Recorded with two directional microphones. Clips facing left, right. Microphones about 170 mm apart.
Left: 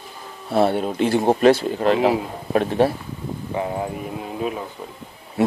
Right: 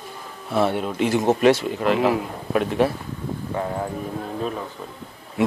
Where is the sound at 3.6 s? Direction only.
10° left (ahead or behind).